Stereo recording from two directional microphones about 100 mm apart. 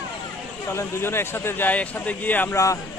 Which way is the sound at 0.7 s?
25° left (ahead or behind).